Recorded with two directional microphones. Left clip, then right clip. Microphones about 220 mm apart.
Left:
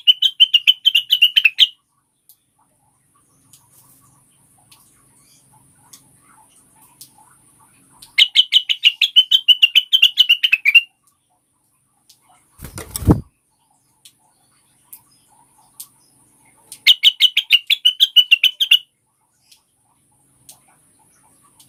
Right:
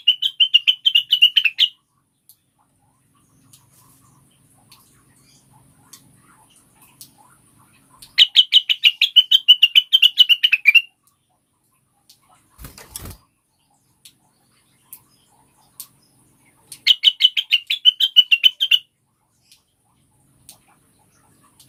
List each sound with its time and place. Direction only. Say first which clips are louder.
0.0 s bird: left 4 dB; 20° left (ahead or behind)
8.1 s bird: even; 15° left (ahead or behind)
16.8 s bird: left 2 dB; 30° left (ahead or behind)